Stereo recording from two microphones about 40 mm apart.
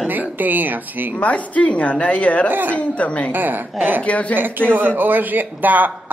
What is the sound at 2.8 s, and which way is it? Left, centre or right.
Speech, left.